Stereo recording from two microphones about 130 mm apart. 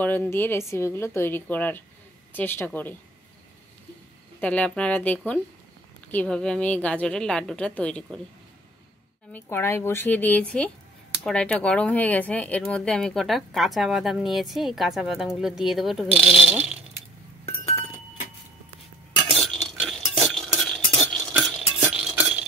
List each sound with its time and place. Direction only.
0.0 s a woman's voice: 15° left (ahead or behind)
4.4 s a woman's voice: 10° left (ahead or behind)
9.3 s a woman's voice: 15° left (ahead or behind); by 16.8 s 5° right (ahead or behind)
17.5 s chink: 45° left (ahead or behind)
19.4 s stir: centre (ahead or behind)
20.2 s a sound: centre (ahead or behind)